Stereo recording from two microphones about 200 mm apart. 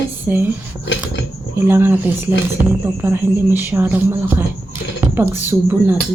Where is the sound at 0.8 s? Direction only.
60° left (ahead or behind).